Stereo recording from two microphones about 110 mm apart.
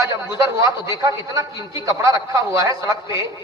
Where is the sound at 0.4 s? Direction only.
30° right (ahead or behind).